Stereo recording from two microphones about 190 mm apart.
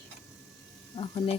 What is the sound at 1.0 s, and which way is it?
Speech, 30° left (ahead or behind).